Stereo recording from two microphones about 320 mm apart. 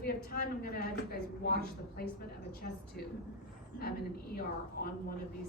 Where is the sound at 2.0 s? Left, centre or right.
Left.